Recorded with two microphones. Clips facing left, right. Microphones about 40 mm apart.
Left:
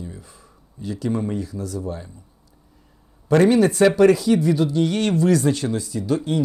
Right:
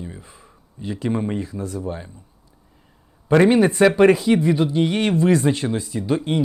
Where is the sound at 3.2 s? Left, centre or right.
Right.